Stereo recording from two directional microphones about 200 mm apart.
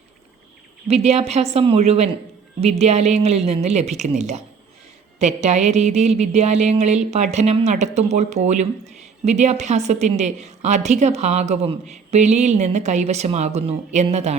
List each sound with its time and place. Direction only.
0.9 s a woman's voice: 30° right (ahead or behind)